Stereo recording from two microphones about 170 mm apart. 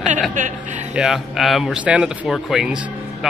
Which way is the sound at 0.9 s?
Centre (ahead or behind).